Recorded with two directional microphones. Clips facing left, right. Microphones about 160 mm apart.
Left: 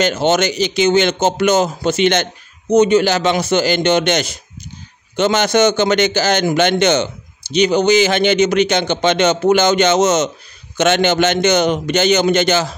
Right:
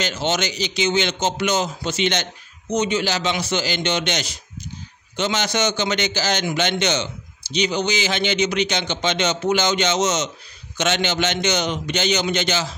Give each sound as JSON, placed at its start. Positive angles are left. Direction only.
{"t": 0.0, "sound": "a man's voice", "side_deg": 50}